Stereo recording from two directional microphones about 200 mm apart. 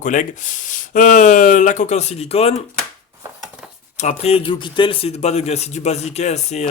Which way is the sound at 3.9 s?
35° left (ahead or behind).